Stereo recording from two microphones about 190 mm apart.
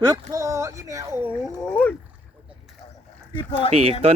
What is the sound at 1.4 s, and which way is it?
Speech, 5° left (ahead or behind).